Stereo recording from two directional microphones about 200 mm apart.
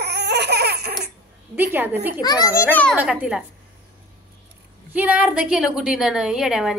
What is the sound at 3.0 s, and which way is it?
Speech, 5° right (ahead or behind).